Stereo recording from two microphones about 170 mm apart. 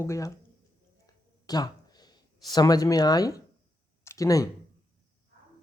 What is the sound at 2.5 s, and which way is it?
Speech, 25° left (ahead or behind).